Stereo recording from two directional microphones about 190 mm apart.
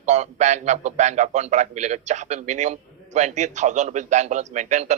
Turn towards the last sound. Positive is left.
turn(degrees=-40)  # may be behind; listen again after turning